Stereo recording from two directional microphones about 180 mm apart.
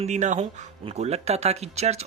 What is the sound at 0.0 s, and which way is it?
Speech, 40° right (ahead or behind).